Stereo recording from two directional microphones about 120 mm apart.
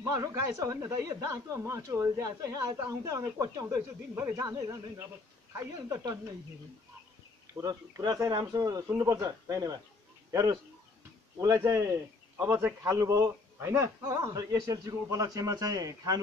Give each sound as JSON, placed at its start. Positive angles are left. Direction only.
{"t": 0.0, "sound": "a man's voice", "side_deg": -25}
{"t": 7.6, "sound": "a man's voice", "side_deg": -30}